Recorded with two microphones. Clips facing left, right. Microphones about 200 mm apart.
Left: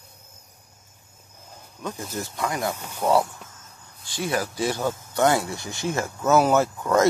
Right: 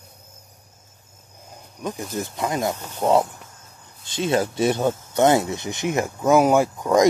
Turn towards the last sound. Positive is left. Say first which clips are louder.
# right 2 dB
turn(degrees=-15)  # may be behind; listen again after turning